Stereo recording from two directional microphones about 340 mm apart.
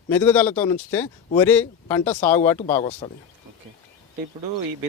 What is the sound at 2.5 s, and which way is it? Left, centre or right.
Speech, centre.